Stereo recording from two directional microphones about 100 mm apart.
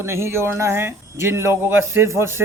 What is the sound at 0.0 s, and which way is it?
Speech, 25° right (ahead or behind).